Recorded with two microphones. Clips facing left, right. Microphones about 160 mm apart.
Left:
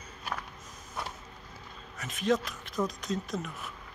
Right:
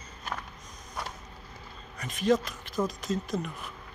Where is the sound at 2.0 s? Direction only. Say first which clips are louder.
Right 3 dB; centre (ahead or behind).